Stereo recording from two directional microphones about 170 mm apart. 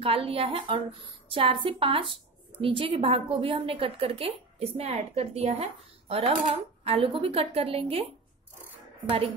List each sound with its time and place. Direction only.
0.0 s a woman's voice: 35° right (ahead or behind)